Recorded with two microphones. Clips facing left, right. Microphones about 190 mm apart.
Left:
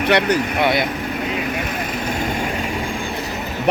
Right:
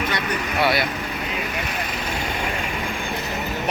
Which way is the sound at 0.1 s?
70° left (ahead or behind).